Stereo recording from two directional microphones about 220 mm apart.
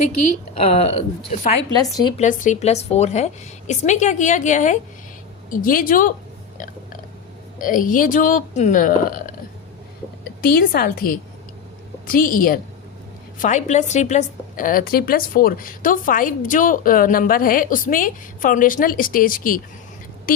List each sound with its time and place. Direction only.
0.5 s speech: 30° left (ahead or behind)
1.8 s a woman's voice: 15° left (ahead or behind)
2.1 s a woman's voice: 35° left (ahead or behind)
7.6 s a woman's voice: 35° left (ahead or behind)
10.4 s a woman's voice: 40° left (ahead or behind)